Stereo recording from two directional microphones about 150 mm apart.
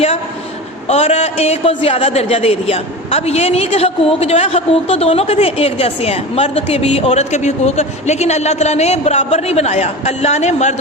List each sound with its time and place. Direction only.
0.9 s a woman's voice: 45° left (ahead or behind)